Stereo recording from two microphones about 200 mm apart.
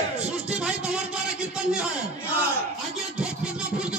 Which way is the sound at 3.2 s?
5° right (ahead or behind).